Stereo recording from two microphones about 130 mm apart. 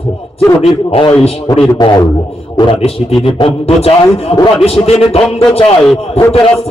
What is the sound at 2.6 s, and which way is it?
Speech, 45° left (ahead or behind).